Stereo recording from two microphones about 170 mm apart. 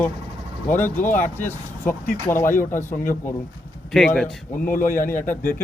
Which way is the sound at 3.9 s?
5° left (ahead or behind).